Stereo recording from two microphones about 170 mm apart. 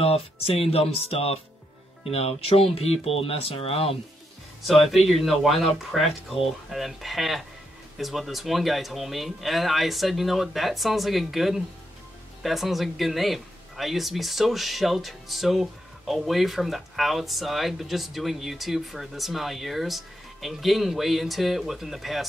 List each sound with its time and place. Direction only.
0.0 s speech: 35° left (ahead or behind)
4.6 s speech: centre (ahead or behind)